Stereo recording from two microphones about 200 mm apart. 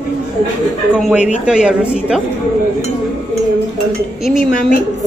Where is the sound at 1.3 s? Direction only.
5° right (ahead or behind).